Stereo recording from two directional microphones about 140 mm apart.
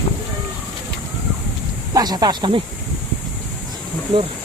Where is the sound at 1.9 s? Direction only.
30° right (ahead or behind).